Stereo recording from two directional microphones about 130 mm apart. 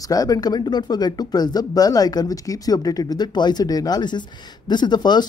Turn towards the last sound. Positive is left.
turn(degrees=35)  # may be behind; listen again after turning